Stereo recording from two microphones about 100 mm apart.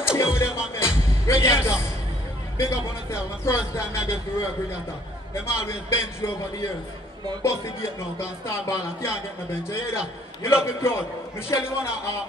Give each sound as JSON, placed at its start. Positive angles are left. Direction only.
{"t": 0.2, "sound": "music", "side_deg": 25}
{"t": 1.2, "sound": "speech", "side_deg": 25}